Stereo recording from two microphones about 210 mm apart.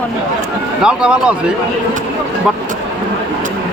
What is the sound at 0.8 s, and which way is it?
Speech, 5° right (ahead or behind).